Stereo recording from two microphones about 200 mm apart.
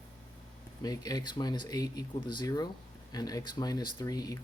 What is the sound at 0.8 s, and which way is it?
Speech, 20° left (ahead or behind).